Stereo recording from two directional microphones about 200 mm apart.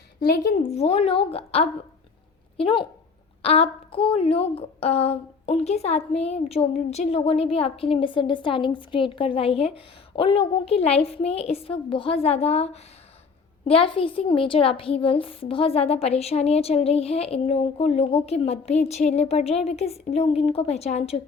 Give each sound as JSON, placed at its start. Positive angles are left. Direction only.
{"t": 0.2, "sound": "a woman's voice", "side_deg": 50}
{"t": 0.7, "sound": "a woman's voice", "side_deg": 30}